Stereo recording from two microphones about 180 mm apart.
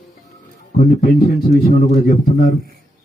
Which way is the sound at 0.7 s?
45° left (ahead or behind).